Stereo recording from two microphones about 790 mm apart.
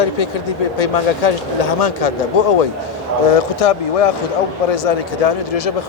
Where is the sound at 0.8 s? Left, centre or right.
Left.